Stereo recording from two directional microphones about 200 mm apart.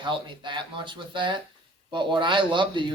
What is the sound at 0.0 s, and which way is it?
Speech, 25° right (ahead or behind).